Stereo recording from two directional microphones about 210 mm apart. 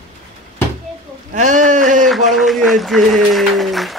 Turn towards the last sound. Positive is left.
turn(degrees=0)  # may be behind; listen again after turning